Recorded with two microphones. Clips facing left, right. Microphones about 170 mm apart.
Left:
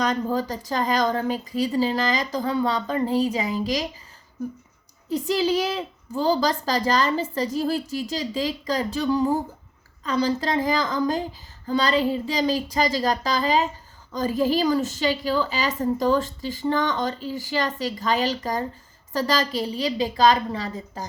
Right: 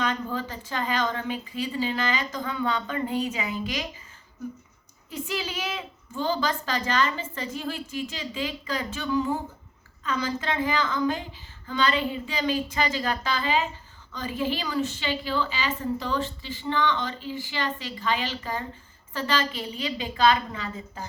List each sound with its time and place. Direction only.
0.0 s a woman's voice: 40° left (ahead or behind)
5.0 s a woman's voice: 35° left (ahead or behind)